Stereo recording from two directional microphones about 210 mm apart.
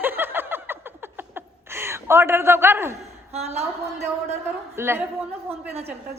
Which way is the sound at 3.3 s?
30° right (ahead or behind).